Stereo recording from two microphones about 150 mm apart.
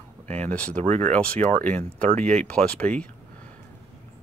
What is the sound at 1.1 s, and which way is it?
Speech, 10° left (ahead or behind).